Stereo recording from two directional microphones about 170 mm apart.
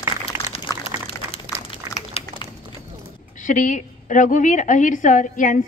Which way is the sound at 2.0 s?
35° left (ahead or behind).